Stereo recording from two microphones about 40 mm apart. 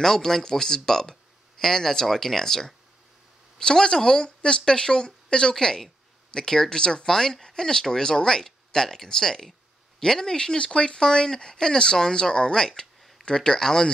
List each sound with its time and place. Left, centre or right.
0.0 s speech: centre
7.1 s speech: centre